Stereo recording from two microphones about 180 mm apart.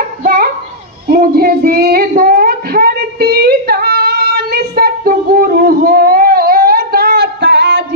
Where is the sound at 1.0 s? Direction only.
55° right (ahead or behind).